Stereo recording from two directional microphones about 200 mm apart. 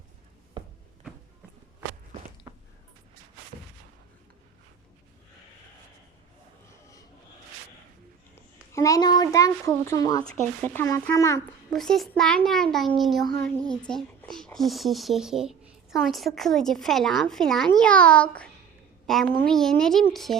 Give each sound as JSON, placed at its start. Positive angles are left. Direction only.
{"t": 0.6, "sound": "a sound", "side_deg": -20}
{"t": 2.5, "sound": "squish", "side_deg": -25}
{"t": 8.7, "sound": "a child's voice", "side_deg": 15}
{"t": 11.7, "sound": "speech", "side_deg": 0}